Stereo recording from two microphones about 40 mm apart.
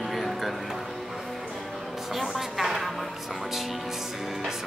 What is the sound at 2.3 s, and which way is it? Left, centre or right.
Speech, centre.